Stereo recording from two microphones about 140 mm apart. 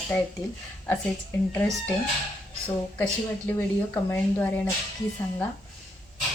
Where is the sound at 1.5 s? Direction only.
10° left (ahead or behind).